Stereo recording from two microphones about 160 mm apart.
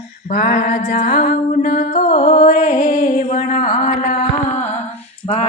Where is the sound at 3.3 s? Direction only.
60° left (ahead or behind).